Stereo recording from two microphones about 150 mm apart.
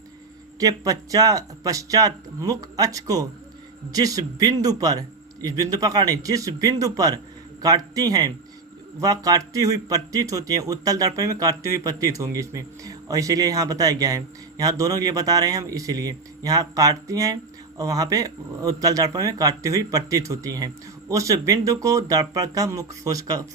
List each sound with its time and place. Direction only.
0.6 s a man's voice: 25° right (ahead or behind)